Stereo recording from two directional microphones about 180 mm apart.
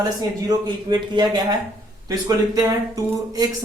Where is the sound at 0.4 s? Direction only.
25° right (ahead or behind).